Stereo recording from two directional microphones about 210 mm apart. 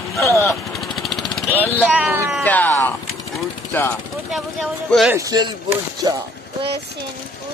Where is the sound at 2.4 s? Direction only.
10° left (ahead or behind).